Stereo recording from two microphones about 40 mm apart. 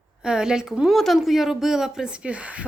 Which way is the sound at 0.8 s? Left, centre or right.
Centre.